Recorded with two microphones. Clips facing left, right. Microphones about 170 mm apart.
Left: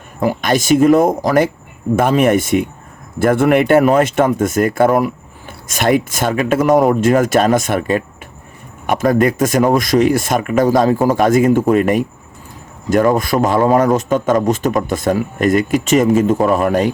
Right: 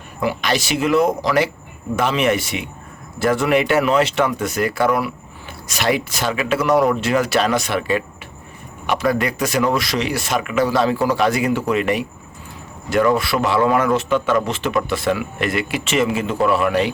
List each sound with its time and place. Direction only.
0.2 s a man's voice: 45° left (ahead or behind)